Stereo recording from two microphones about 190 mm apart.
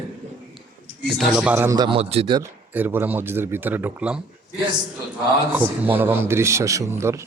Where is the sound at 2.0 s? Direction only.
30° right (ahead or behind).